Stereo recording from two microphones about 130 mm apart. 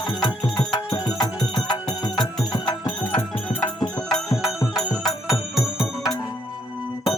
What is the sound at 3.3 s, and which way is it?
Music, 15° left (ahead or behind).